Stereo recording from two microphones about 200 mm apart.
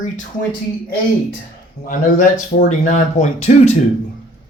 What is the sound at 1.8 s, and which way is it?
Speech, 45° left (ahead or behind).